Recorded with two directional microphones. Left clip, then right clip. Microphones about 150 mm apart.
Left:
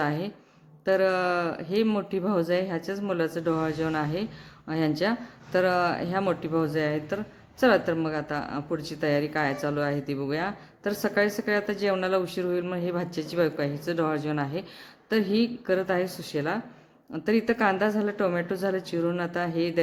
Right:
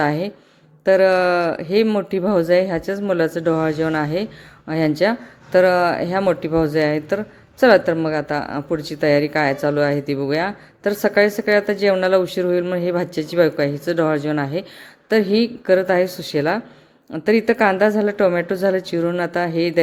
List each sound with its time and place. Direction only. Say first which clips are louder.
0.0 s a woman's voice: right 9 dB; 30° right (ahead or behind)